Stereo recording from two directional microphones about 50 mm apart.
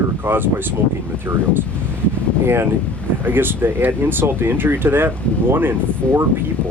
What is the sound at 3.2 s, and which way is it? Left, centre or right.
Speech, right.